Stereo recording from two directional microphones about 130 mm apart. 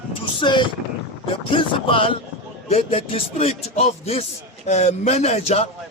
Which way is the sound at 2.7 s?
45° left (ahead or behind).